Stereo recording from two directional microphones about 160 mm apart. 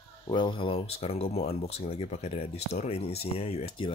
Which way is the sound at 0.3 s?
30° left (ahead or behind).